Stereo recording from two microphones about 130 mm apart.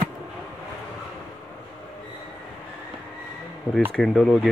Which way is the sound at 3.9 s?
Centre (ahead or behind).